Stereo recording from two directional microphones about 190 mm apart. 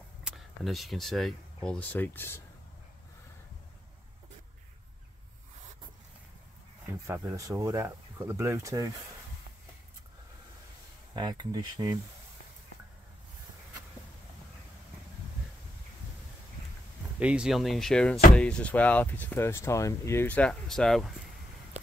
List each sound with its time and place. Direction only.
0.2 s speech: centre (ahead or behind)
6.9 s speech: 15° right (ahead or behind)
11.1 s speech: 25° right (ahead or behind)
17.2 s speech: 5° right (ahead or behind)